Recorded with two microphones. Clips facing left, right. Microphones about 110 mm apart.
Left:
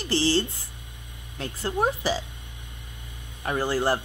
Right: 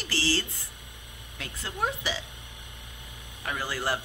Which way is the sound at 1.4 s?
35° left (ahead or behind).